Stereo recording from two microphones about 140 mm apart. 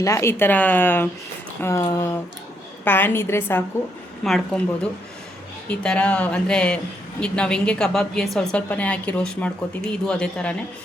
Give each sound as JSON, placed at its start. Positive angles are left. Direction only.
{"t": 0.0, "sound": "a woman's voice", "side_deg": 20}